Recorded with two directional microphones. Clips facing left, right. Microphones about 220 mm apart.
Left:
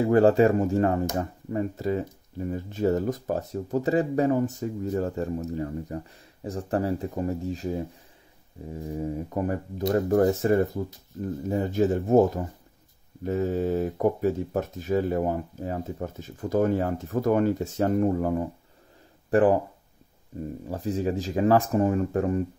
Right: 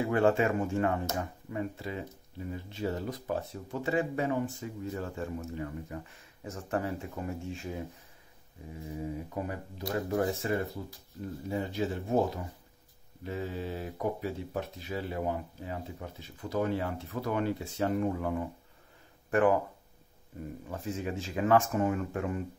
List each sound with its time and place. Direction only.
0.0 s speech: 35° left (ahead or behind)
20.6 s speech: 35° left (ahead or behind)